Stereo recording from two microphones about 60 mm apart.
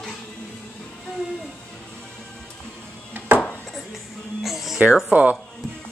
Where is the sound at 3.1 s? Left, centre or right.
Right.